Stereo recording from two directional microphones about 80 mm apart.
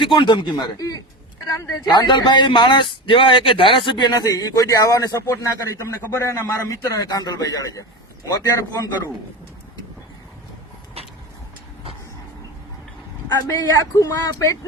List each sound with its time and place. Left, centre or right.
0.0 s speech: left
0.8 s a man's voice: left
1.9 s a man's voice: left
13.5 s a man's voice: left